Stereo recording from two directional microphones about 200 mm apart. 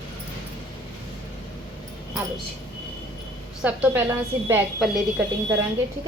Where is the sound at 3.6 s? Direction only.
10° right (ahead or behind).